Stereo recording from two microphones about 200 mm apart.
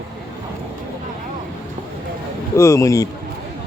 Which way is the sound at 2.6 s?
15° left (ahead or behind).